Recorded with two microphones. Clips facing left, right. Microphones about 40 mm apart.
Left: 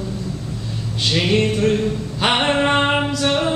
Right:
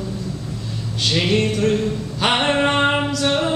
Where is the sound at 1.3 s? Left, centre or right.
Centre.